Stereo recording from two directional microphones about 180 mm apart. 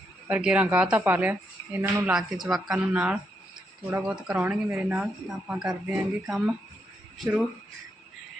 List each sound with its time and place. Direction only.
0.3 s speech: 10° right (ahead or behind)